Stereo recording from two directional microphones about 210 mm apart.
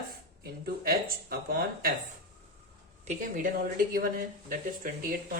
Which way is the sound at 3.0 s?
35° right (ahead or behind).